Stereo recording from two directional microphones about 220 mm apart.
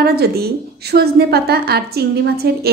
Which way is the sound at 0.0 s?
45° right (ahead or behind).